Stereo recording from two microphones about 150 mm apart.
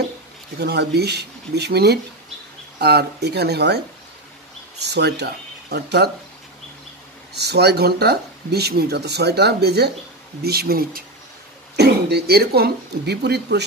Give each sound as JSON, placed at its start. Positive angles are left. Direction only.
{"t": 0.6, "sound": "speech", "side_deg": -90}
{"t": 4.8, "sound": "speech", "side_deg": -90}
{"t": 7.3, "sound": "speech", "side_deg": -90}